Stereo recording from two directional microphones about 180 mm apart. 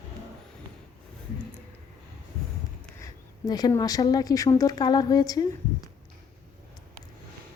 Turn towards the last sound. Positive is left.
turn(degrees=20)  # may be behind; listen again after turning